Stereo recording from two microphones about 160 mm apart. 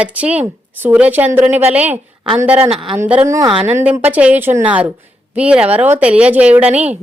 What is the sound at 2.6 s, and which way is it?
Speech, 30° right (ahead or behind).